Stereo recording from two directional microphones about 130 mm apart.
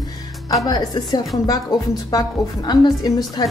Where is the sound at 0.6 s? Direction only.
30° left (ahead or behind).